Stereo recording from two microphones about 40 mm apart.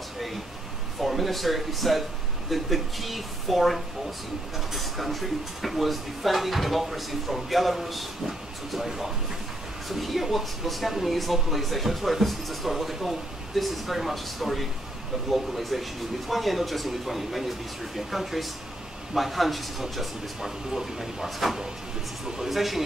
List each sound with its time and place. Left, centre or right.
1.0 s speech: centre